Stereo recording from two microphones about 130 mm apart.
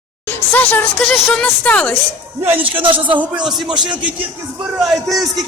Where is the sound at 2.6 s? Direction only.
45° right (ahead or behind).